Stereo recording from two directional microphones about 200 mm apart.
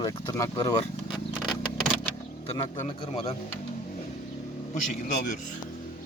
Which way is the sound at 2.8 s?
25° left (ahead or behind).